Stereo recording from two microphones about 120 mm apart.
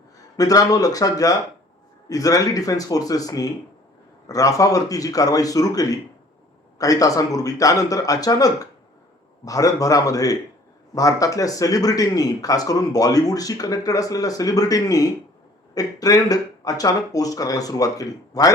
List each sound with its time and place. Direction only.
0.3 s a man's voice: 30° left (ahead or behind)